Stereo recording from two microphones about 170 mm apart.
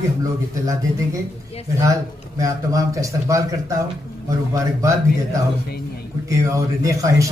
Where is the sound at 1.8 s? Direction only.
20° right (ahead or behind).